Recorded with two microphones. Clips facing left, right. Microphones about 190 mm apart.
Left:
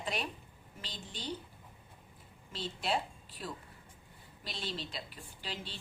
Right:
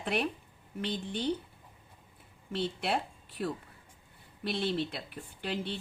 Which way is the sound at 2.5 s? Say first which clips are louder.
Right 4 dB; 60° right (ahead or behind).